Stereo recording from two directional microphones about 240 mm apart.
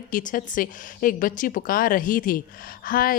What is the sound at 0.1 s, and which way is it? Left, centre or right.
Speech, left.